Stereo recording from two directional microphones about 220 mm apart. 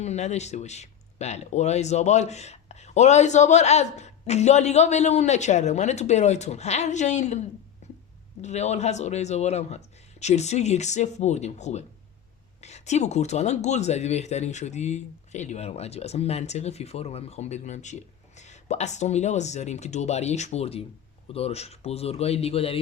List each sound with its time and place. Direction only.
0.0 s speech: 30° left (ahead or behind)
7.8 s a sound: 30° left (ahead or behind)
8.4 s a man's voice: 30° left (ahead or behind)